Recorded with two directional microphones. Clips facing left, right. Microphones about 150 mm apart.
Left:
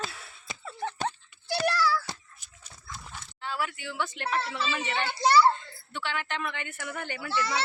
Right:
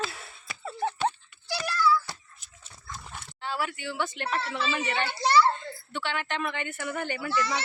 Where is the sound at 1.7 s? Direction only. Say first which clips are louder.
Right 3 dB; 90° left.